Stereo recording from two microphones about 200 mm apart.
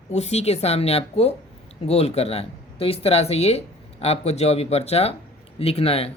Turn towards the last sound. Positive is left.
turn(degrees=30)  # may be behind; listen again after turning